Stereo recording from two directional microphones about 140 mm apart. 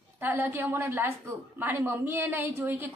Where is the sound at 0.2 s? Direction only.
15° right (ahead or behind).